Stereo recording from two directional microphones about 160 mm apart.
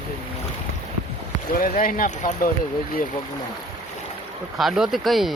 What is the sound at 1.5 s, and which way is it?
Speech, 60° left (ahead or behind).